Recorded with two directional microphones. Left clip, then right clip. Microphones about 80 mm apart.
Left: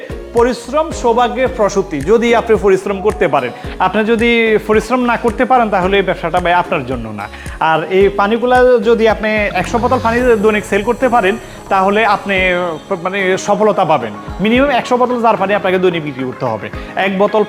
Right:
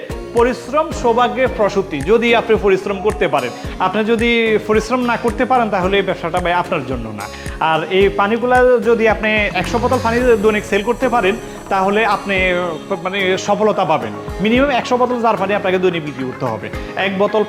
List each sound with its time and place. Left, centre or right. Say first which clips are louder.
0.4 s a man's voice: left 2 dB; left